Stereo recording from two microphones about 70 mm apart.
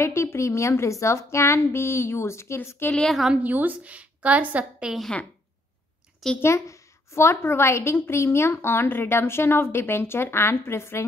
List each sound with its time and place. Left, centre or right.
0.0 s a woman's voice: left
3.1 s a woman's voice: centre
3.4 s a woman's voice: right
6.4 s a woman's voice: left